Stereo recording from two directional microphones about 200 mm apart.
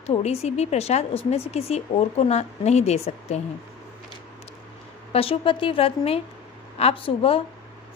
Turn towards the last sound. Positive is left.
turn(degrees=30)  # may be behind; listen again after turning